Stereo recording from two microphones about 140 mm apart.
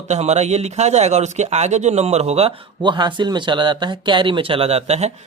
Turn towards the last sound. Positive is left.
turn(degrees=-50)  # may be behind; listen again after turning